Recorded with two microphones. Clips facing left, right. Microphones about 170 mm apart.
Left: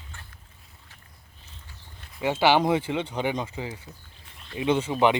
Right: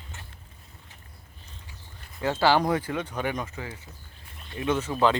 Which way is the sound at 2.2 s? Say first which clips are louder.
Left 1 dB; 20° left (ahead or behind).